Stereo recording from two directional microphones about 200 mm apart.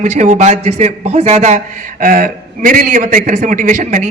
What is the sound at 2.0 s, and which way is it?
A man's voice, 45° right (ahead or behind).